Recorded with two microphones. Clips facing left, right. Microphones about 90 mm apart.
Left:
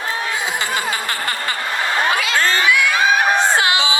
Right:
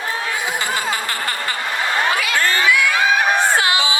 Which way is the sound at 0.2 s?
20° left (ahead or behind).